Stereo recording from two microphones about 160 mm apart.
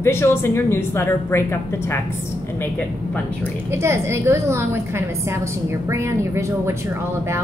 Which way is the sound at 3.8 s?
15° right (ahead or behind).